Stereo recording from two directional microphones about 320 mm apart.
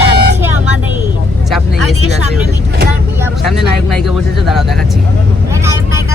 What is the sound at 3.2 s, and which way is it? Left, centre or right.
Speech, centre.